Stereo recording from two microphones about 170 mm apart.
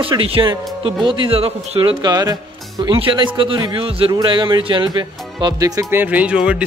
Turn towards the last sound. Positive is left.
turn(degrees=-5)  # may be behind; listen again after turning